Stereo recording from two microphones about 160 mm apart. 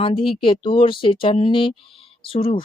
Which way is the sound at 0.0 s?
35° left (ahead or behind).